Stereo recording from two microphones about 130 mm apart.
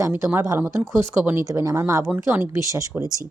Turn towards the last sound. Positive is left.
turn(degrees=-25)  # may be behind; listen again after turning